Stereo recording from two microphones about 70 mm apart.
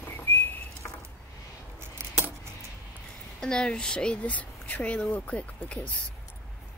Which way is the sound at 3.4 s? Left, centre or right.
Centre.